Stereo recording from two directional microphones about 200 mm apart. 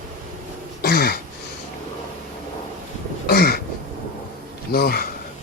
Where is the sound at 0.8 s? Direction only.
50° left (ahead or behind).